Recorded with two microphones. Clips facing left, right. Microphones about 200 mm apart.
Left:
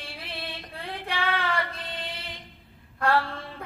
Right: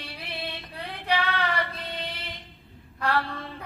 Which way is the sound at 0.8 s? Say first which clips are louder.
Right 4 dB; 50° left (ahead or behind).